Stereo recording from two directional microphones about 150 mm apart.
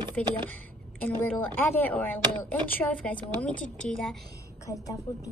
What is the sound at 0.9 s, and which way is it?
Speech, 10° left (ahead or behind).